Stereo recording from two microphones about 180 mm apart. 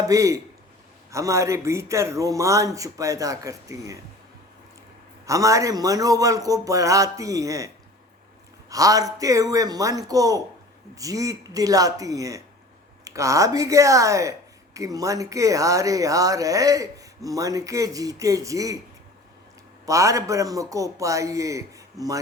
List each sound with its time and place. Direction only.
0.1 s a man's voice: 15° right (ahead or behind)
5.2 s a woman's voice: 20° right (ahead or behind)
8.7 s a woman's voice: 20° right (ahead or behind)
19.8 s a man's voice: 15° right (ahead or behind)